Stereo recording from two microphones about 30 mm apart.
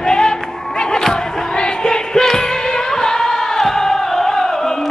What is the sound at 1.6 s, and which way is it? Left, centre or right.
Music, left.